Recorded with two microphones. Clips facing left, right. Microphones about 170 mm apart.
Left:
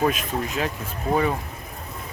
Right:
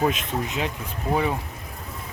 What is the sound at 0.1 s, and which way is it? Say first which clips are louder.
Speech: left 1 dB; 25° right (ahead or behind).